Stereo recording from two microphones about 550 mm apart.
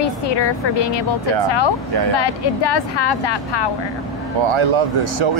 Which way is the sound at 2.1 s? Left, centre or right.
Left.